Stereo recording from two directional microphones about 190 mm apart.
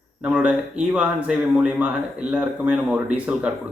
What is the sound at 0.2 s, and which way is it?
Speech, 5° right (ahead or behind).